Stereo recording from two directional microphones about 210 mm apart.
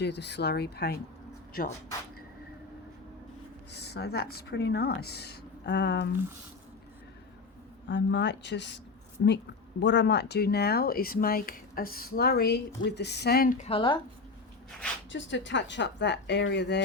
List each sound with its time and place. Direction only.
0.0 s speech: 55° left (ahead or behind)
3.7 s speech: 50° left (ahead or behind)
7.9 s speech: 60° left (ahead or behind); by 13.7 s 40° left (ahead or behind)
13.7 s a woman's voice: 25° left (ahead or behind)
15.1 s speech: 60° left (ahead or behind)